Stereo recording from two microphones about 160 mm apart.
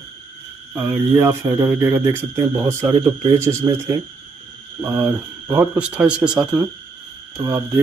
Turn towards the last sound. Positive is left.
turn(degrees=-15)  # may be behind; listen again after turning